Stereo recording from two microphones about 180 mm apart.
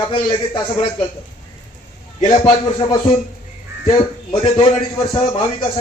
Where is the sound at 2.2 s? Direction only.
25° left (ahead or behind).